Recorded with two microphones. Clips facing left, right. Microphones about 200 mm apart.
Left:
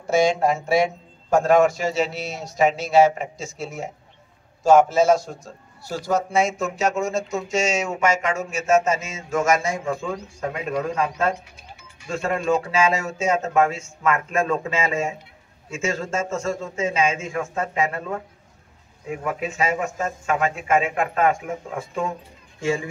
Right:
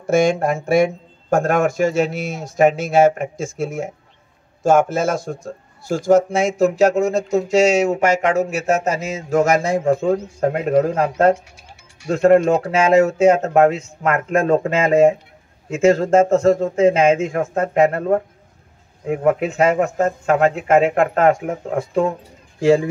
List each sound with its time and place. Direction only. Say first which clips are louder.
0.0 s a man's voice: right 3 dB; 50° right (ahead or behind)
6.8 s speech: right 3 dB; 60° right (ahead or behind)